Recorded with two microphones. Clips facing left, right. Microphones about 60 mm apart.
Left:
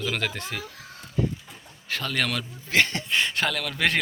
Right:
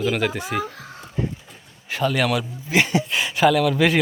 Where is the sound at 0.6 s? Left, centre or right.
Right.